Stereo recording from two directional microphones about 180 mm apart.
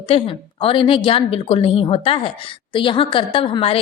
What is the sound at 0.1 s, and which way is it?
A woman's voice, 30° left (ahead or behind).